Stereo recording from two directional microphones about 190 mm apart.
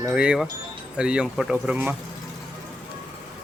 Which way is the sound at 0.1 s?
5° right (ahead or behind).